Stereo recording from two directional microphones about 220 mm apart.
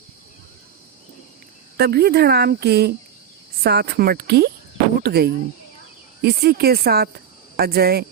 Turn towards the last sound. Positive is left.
turn(degrees=-45)  # may be behind; listen again after turning